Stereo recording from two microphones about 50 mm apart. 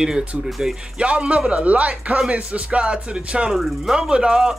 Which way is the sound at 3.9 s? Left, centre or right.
Centre.